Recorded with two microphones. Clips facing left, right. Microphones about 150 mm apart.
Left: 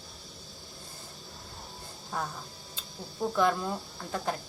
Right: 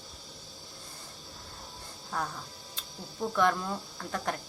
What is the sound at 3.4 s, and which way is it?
Speech, 20° left (ahead or behind).